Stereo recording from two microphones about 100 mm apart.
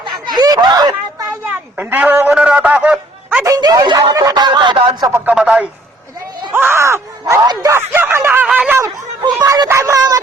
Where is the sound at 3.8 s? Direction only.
50° right (ahead or behind).